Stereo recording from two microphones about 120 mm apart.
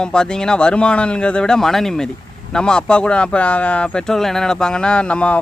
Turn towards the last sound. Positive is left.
turn(degrees=10)  # may be behind; listen again after turning